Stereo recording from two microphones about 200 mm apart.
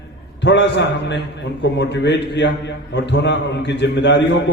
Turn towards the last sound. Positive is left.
turn(degrees=60)  # may be behind; listen again after turning